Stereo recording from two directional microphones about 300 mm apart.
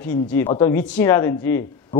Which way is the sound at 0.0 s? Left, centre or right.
Centre.